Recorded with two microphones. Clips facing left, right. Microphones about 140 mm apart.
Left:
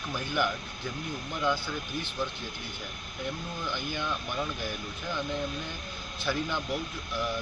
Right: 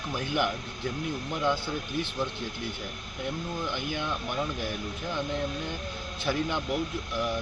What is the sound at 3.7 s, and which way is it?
Speech, 20° right (ahead or behind).